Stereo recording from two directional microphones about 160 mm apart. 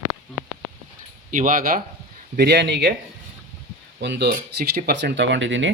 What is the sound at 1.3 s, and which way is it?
Speech, 55° right (ahead or behind).